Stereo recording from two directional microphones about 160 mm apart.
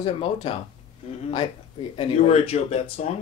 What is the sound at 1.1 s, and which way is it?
Speech, 40° left (ahead or behind).